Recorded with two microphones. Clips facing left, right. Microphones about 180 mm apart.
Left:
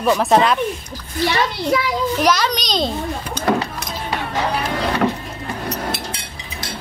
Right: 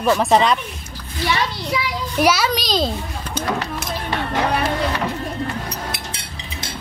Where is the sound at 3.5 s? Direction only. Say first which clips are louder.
Left 6 dB; 55° left (ahead or behind).